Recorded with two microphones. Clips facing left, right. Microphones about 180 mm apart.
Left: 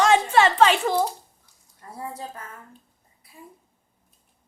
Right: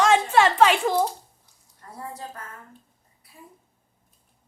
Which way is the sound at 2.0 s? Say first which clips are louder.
Left 2 dB; 10° left (ahead or behind).